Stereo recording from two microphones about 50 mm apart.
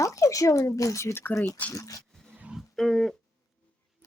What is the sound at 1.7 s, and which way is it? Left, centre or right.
Speech, left.